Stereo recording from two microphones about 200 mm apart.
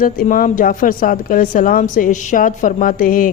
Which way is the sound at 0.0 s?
45° left (ahead or behind).